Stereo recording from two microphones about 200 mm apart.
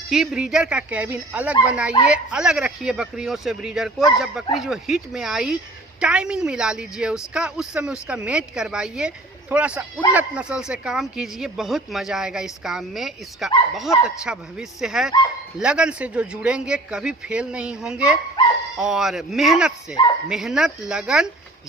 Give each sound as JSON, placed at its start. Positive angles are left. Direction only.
{"t": 0.1, "sound": "speech", "side_deg": 0}